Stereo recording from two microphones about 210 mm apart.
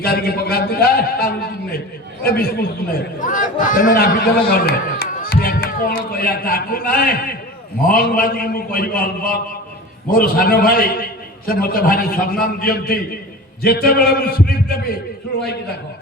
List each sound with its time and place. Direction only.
0.0 s a man's voice: 45° left (ahead or behind)